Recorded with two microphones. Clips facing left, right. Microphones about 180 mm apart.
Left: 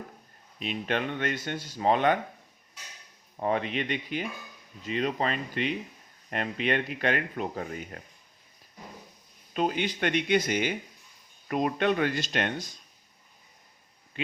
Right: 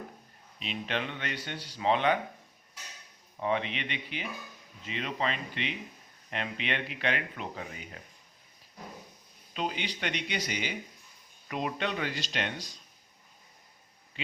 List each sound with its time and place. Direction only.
0.6 s speech: 50° left (ahead or behind)
3.4 s speech: 45° left (ahead or behind)
9.6 s speech: 50° left (ahead or behind)